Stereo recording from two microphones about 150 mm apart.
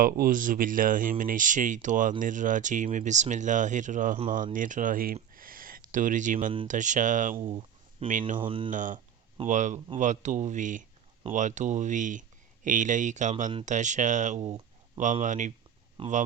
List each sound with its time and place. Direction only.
0.0 s speech: 65° right (ahead or behind)
5.3 s a sound: 70° right (ahead or behind)
6.7 s speech: 55° right (ahead or behind)
7.4 s a sound: 35° right (ahead or behind)
8.4 s speech: 35° right (ahead or behind)
8.7 s speech: 60° right (ahead or behind)
16.0 s speech: 35° right (ahead or behind)